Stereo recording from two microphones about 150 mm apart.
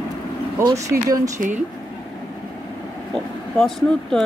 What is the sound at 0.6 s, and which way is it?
Speech, 20° right (ahead or behind).